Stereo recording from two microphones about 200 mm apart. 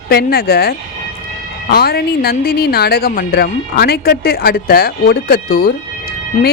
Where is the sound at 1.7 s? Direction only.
50° left (ahead or behind).